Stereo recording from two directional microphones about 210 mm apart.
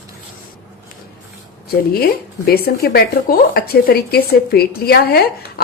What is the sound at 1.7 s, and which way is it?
Speech, 45° left (ahead or behind).